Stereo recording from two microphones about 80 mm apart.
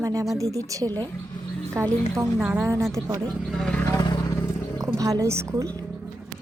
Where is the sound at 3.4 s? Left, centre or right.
Centre.